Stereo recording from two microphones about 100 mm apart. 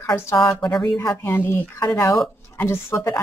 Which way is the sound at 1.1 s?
20° left (ahead or behind).